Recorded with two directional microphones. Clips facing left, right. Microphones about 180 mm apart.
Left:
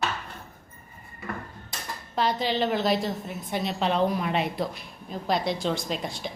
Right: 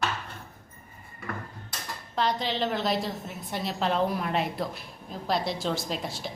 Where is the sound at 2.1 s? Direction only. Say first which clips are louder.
Left 2 dB; 5° left (ahead or behind).